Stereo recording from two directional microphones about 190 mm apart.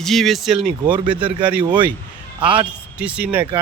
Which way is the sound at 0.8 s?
25° right (ahead or behind).